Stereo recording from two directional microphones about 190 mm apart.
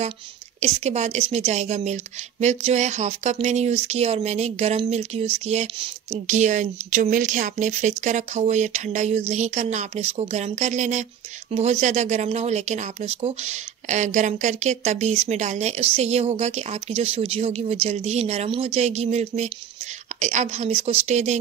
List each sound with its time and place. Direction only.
0.6 s speech: 35° right (ahead or behind)